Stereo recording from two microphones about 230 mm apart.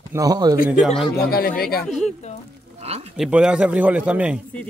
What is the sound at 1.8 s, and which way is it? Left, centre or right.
Speech, centre.